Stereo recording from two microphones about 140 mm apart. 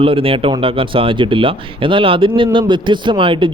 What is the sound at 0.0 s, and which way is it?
Speech, 40° right (ahead or behind).